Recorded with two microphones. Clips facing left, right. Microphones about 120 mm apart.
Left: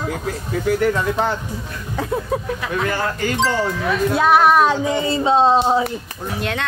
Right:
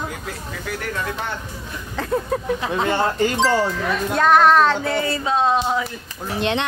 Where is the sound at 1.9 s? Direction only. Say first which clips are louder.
Even; 5° left (ahead or behind).